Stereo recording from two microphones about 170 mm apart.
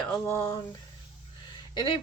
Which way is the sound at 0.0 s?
10° left (ahead or behind).